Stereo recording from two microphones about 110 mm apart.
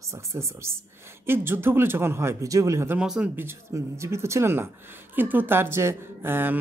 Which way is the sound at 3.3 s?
20° right (ahead or behind).